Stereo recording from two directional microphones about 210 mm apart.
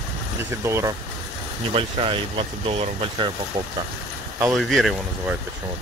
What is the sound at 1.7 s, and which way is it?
Speech, 25° right (ahead or behind).